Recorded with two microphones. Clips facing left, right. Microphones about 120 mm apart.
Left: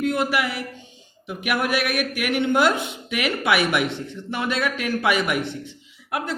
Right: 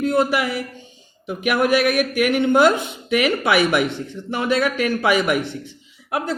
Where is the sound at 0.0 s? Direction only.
40° right (ahead or behind).